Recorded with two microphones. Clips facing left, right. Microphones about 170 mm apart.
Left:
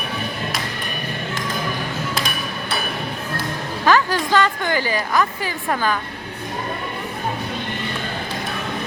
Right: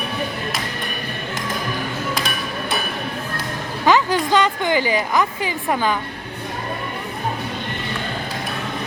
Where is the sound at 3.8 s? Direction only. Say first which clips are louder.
Right 1 dB; 20° right (ahead or behind).